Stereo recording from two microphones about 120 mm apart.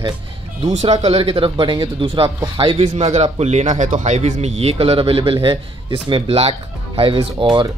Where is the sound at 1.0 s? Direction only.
50° right (ahead or behind).